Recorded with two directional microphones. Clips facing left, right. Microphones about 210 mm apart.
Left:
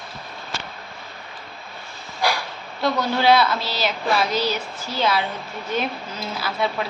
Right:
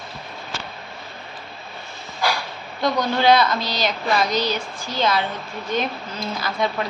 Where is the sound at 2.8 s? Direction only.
5° left (ahead or behind).